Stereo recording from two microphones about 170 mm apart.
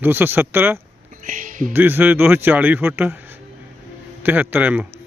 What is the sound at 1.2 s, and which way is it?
Speech, 50° right (ahead or behind).